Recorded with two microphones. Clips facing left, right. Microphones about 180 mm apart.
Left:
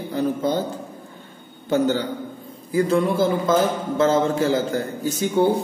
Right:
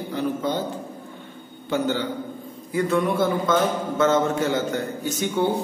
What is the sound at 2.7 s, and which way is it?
Speech, 30° left (ahead or behind).